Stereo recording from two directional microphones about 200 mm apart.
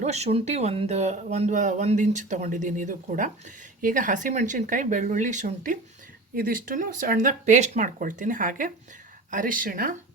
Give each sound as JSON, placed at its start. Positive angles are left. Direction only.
{"t": 0.0, "sound": "speech", "side_deg": -35}